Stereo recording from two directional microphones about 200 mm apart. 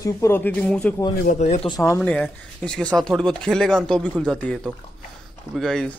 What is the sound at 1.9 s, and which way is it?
Speech, 5° left (ahead or behind).